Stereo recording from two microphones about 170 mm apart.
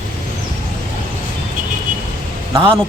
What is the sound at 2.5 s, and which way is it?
Speech, 30° right (ahead or behind).